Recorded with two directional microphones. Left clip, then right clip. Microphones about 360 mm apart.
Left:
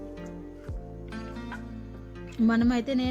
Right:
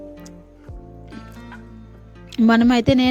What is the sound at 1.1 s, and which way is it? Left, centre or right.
Music, centre.